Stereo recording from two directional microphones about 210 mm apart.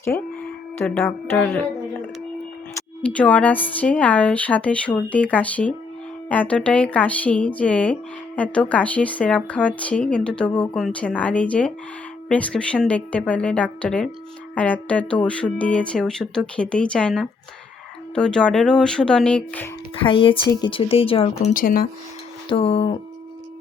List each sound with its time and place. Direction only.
0.1 s speech: 10° left (ahead or behind)
2.7 s speech: 5° left (ahead or behind)
20.5 s speech: 20° left (ahead or behind); by 21.8 s 40° left (ahead or behind)
22.4 s speech: 25° left (ahead or behind)